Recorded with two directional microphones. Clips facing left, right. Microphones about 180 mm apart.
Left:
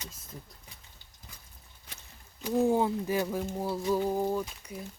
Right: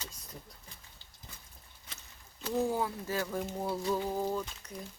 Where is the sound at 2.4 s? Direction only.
15° left (ahead or behind).